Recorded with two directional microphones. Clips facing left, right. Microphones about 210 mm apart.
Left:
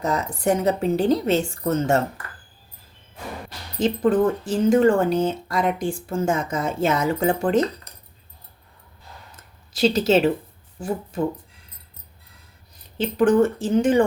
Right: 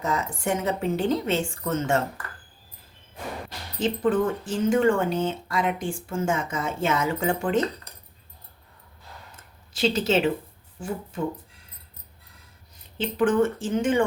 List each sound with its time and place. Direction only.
0.0 s speech: 35° left (ahead or behind)
3.8 s speech: 40° left (ahead or behind)
9.7 s speech: 40° left (ahead or behind)
13.0 s speech: 40° left (ahead or behind)